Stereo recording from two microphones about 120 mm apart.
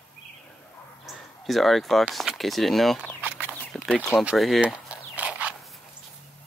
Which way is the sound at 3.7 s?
5° left (ahead or behind).